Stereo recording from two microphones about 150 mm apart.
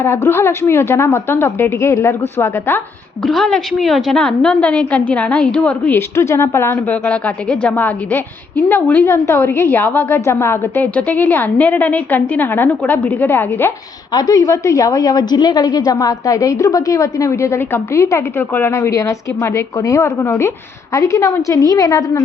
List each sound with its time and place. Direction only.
0.0 s a woman's voice: 15° left (ahead or behind)
3.2 s a woman's voice: 5° left (ahead or behind)
14.1 s a woman's voice: 25° left (ahead or behind)